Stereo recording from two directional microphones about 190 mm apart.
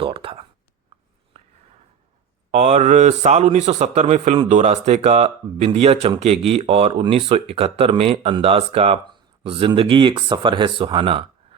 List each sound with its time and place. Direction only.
0.0 s speech: 30° right (ahead or behind)
2.5 s a man's voice: 35° right (ahead or behind)